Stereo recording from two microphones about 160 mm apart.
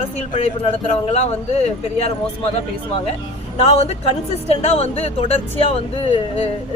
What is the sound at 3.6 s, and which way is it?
A woman's voice, 40° left (ahead or behind).